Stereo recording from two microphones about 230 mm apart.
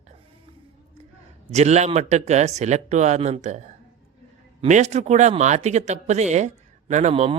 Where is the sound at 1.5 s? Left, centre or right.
Right.